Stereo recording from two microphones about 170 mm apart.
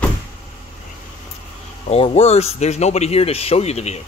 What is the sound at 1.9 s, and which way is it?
Speech, 35° left (ahead or behind).